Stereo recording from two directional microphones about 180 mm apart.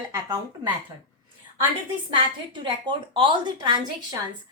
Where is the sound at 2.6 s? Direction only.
30° right (ahead or behind).